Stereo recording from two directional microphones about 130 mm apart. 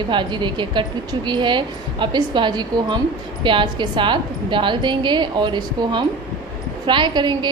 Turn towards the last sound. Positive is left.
turn(degrees=-35)  # may be behind; listen again after turning